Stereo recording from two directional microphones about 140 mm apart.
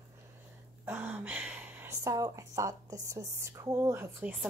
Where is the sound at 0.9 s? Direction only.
10° right (ahead or behind).